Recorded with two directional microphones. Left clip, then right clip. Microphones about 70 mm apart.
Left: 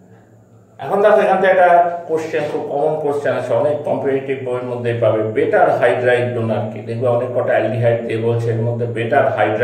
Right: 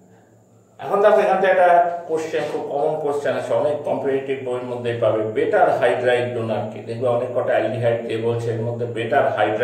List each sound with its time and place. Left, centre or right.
0.8 s a man's voice: right
7.9 s speech: centre
8.4 s a man's voice: centre